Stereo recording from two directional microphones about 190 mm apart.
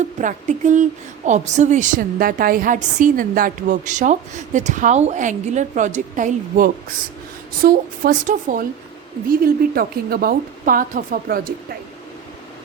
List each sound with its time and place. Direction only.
0.0 s a woman's voice: 40° right (ahead or behind)